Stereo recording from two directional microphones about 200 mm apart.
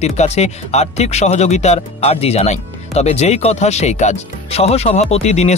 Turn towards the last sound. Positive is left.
turn(degrees=35)  # may be behind; listen again after turning